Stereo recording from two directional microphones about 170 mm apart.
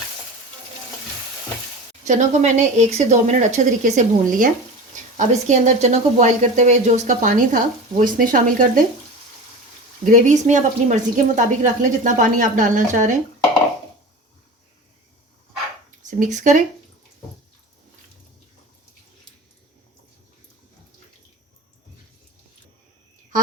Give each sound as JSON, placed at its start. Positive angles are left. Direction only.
{"t": 2.0, "sound": "speech", "side_deg": -45}
{"t": 10.1, "sound": "speech", "side_deg": -45}
{"t": 16.0, "sound": "speech", "side_deg": -45}